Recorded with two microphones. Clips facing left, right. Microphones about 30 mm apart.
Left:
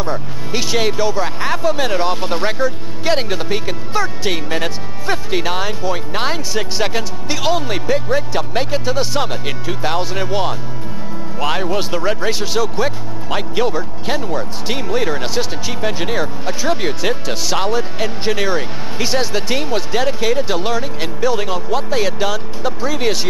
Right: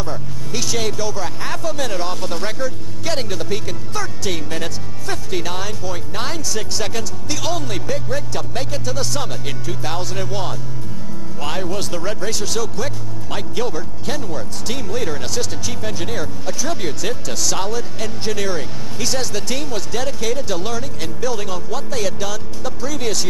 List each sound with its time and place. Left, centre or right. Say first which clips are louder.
0.0 s speech: left 5 dB; left